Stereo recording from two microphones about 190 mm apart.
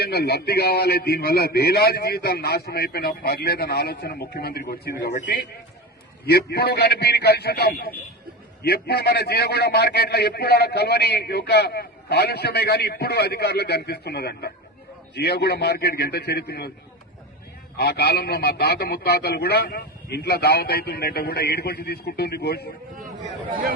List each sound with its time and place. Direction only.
0.0 s a man's voice: 60° left (ahead or behind)
6.2 s a man's voice: 55° left (ahead or behind)
17.7 s a man's voice: 60° left (ahead or behind)
23.2 s speech: 45° right (ahead or behind)